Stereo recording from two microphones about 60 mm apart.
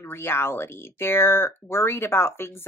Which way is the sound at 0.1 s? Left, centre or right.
Left.